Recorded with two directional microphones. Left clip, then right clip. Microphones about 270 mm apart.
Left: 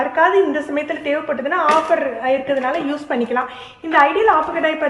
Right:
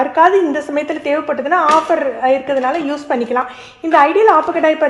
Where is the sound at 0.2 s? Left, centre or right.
Centre.